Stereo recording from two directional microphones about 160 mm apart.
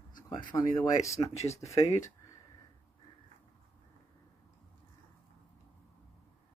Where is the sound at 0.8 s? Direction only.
20° left (ahead or behind).